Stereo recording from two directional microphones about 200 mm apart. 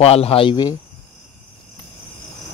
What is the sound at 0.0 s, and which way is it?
Speech, 30° left (ahead or behind).